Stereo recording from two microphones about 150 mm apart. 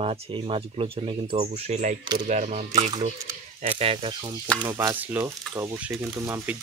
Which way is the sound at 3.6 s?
40° right (ahead or behind).